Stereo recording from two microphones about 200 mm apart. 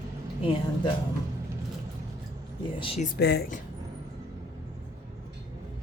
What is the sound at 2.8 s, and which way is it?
Speech, 30° left (ahead or behind).